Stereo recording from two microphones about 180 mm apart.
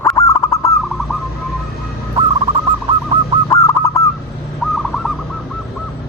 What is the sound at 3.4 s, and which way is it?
Bird, 15° left (ahead or behind).